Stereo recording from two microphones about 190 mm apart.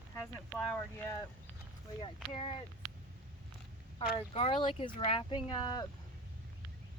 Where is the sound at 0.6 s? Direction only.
5° left (ahead or behind).